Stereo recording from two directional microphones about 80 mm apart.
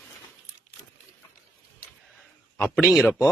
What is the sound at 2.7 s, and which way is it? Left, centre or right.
Speech, centre.